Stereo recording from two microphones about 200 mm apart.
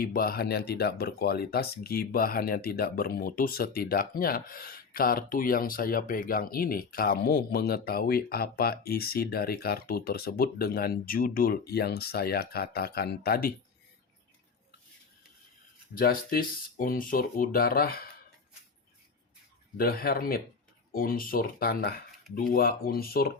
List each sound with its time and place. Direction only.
0.0 s speech: 45° left (ahead or behind)
16.0 s speech: 45° left (ahead or behind)
19.7 s speech: 50° left (ahead or behind)